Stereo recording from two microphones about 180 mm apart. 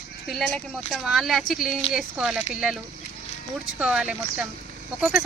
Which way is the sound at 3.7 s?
5° right (ahead or behind).